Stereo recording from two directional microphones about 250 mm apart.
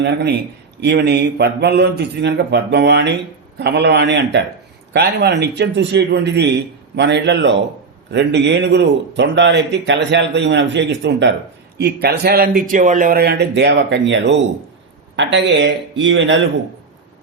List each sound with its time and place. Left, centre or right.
0.0 s speech: right